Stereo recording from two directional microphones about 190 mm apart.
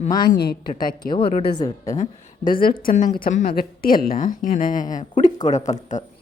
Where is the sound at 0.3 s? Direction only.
55° left (ahead or behind).